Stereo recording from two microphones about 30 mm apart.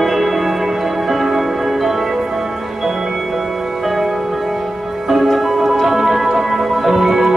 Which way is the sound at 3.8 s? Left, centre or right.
Centre.